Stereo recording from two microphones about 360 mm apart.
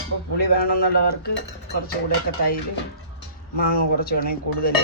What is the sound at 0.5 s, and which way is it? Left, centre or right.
Cutlery, left.